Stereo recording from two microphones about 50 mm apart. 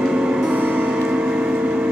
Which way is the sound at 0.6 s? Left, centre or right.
Right.